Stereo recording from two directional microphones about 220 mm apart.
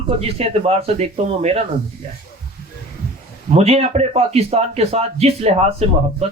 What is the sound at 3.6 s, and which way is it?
A man's voice, 30° right (ahead or behind).